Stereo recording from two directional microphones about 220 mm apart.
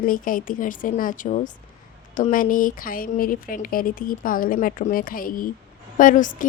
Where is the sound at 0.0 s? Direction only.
40° left (ahead or behind).